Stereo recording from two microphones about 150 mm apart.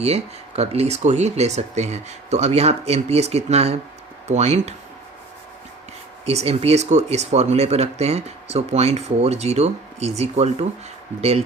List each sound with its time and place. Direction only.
0.0 s speech: 45° right (ahead or behind)
6.2 s speech: 45° right (ahead or behind)